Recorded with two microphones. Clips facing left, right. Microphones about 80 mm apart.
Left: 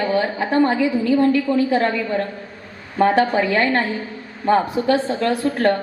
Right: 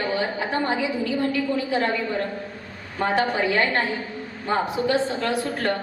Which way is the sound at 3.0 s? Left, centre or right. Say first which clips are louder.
Left 6 dB; left.